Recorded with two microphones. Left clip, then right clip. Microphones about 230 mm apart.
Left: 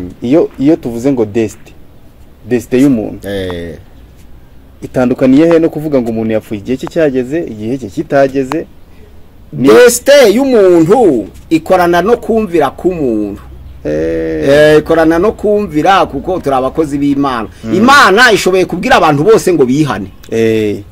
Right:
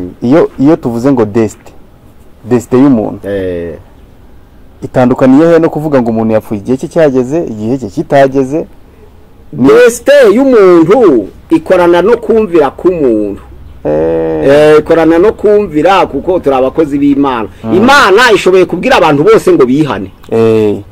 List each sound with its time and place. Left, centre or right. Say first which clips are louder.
0.2 s speech: right 3 dB; right
3.3 s speech: right 4 dB; left
4.9 s speech: right 3 dB; centre
9.8 s speech: right 1 dB; left
13.8 s a sound: right 4 dB; centre
14.6 s speech: even; left
20.3 s a sound: right 4 dB; centre